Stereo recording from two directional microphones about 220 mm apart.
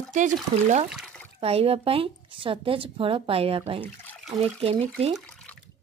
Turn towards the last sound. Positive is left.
turn(degrees=5)  # may be behind; listen again after turning